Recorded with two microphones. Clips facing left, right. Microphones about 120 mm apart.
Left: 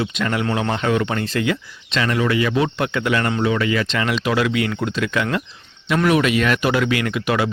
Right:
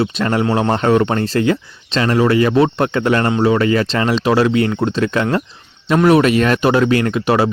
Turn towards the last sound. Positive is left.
turn(degrees=-35)  # may be behind; listen again after turning